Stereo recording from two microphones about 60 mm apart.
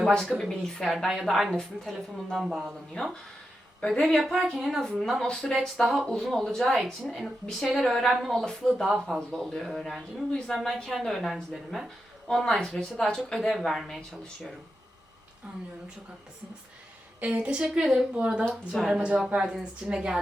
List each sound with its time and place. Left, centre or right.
0.3 s a woman's voice: centre
3.0 s a woman's voice: centre
5.3 s a woman's voice: centre
5.5 s a woman's voice: centre
17.2 s a woman's voice: centre